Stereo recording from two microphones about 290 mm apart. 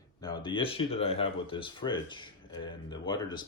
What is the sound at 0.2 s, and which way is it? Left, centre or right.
Speech, centre.